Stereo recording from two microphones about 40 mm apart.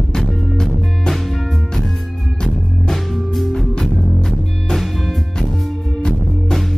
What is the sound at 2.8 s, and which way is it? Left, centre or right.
Music, centre.